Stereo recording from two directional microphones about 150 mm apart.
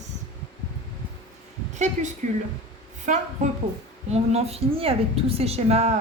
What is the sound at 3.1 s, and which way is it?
A woman's voice, 55° right (ahead or behind).